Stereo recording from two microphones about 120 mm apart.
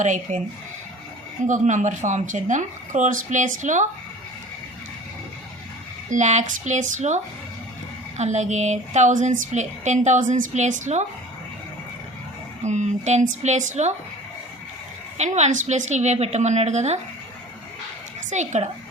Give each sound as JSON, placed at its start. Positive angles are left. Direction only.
{"t": 0.0, "sound": "speech", "side_deg": -90}
{"t": 1.5, "sound": "speech", "side_deg": -90}
{"t": 6.1, "sound": "speech", "side_deg": -80}
{"t": 8.2, "sound": "a woman's voice", "side_deg": -75}
{"t": 12.6, "sound": "a woman's voice", "side_deg": -80}
{"t": 15.2, "sound": "a woman's voice", "side_deg": -80}
{"t": 18.3, "sound": "speech", "side_deg": -80}